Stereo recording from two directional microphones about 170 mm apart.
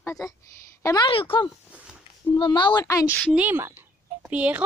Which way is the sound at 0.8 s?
25° left (ahead or behind).